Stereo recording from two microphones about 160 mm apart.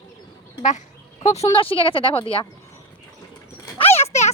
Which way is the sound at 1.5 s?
35° left (ahead or behind).